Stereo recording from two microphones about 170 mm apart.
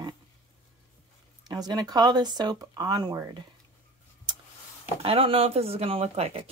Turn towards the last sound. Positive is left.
turn(degrees=-35)  # may be behind; listen again after turning